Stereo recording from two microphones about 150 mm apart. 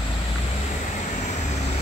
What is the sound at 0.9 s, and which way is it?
Vehicle, 50° left (ahead or behind).